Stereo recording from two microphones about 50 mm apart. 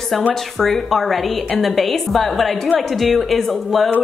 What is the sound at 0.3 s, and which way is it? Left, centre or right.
Speech, centre.